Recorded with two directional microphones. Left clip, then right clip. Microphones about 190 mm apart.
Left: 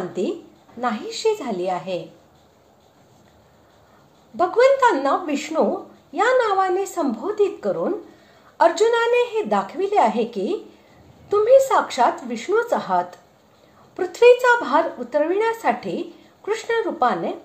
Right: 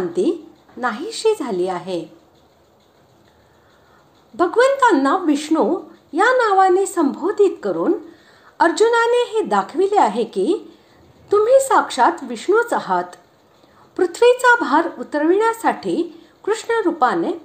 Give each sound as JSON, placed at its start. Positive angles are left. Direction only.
{"t": 0.1, "sound": "a woman's voice", "side_deg": -30}
{"t": 4.4, "sound": "speech", "side_deg": -30}